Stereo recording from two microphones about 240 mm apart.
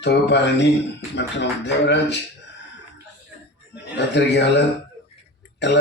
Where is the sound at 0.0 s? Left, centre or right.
Left.